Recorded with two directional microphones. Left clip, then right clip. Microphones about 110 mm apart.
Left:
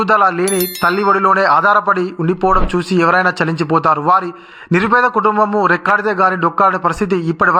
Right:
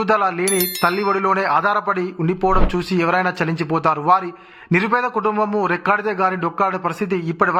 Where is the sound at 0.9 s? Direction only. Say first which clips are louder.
Left 6 dB; 35° left (ahead or behind).